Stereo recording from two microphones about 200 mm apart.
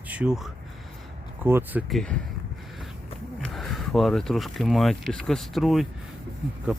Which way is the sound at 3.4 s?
Centre (ahead or behind).